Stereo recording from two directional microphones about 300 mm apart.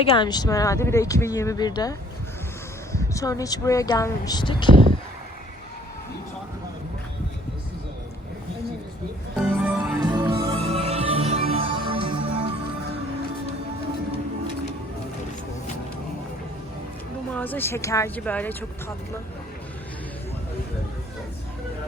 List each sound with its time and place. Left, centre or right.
0.0 s speech: centre
9.6 s music: centre
10.0 s music: centre
17.3 s speech: centre